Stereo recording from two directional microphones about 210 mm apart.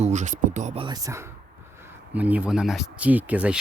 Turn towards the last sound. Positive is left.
turn(degrees=-5)  # may be behind; listen again after turning